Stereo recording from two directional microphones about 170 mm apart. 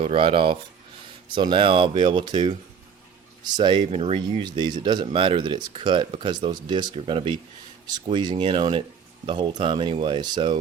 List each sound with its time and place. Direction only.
0.0 s speech: 35° right (ahead or behind)